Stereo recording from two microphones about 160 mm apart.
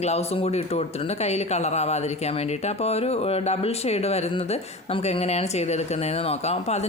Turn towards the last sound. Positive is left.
turn(degrees=40)  # may be behind; listen again after turning